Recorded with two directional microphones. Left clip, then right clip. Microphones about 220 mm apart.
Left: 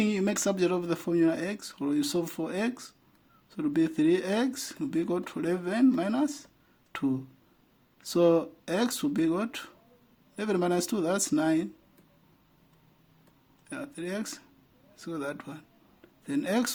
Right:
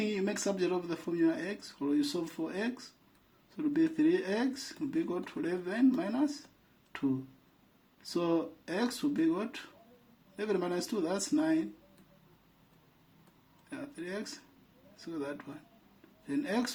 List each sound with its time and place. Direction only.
0.0 s speech: 50° left (ahead or behind)
8.1 s speech: 50° left (ahead or behind)
13.7 s speech: 50° left (ahead or behind)